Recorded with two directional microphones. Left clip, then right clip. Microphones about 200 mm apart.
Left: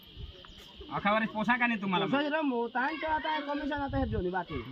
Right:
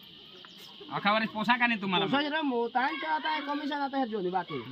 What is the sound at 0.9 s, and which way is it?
A man's voice, centre (ahead or behind).